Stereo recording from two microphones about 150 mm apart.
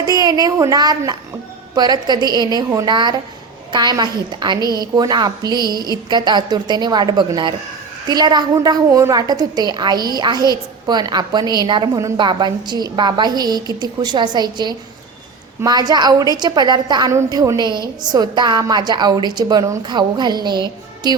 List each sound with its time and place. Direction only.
0.0 s a woman's voice: 25° right (ahead or behind)